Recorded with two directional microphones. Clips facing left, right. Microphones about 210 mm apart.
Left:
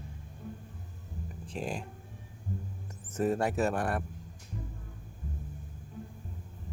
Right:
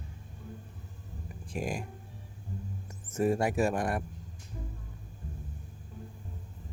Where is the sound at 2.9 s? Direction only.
10° right (ahead or behind).